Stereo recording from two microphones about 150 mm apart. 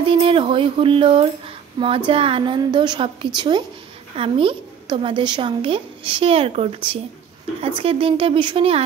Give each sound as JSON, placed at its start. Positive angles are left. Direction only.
{"t": 0.0, "sound": "a woman's voice", "side_deg": -35}